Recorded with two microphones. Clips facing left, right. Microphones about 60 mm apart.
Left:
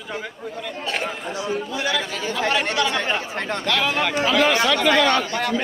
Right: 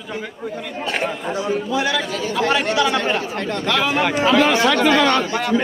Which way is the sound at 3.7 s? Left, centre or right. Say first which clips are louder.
Right 3 dB; right.